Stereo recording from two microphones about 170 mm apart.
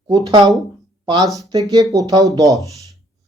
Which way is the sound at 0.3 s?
25° right (ahead or behind).